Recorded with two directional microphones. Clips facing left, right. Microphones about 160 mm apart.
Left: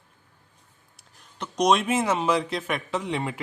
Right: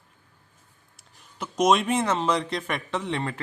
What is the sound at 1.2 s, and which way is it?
Speech, 5° right (ahead or behind).